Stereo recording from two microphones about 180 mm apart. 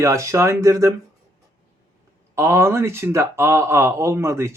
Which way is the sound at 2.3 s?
15° right (ahead or behind).